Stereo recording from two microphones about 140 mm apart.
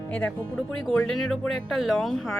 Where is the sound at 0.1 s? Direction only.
10° left (ahead or behind).